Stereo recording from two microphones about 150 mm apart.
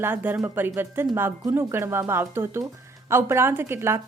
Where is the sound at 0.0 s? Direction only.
15° right (ahead or behind).